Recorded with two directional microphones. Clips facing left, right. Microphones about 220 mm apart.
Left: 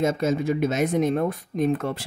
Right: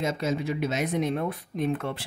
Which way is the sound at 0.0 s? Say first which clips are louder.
Left 5 dB; 50° left (ahead or behind).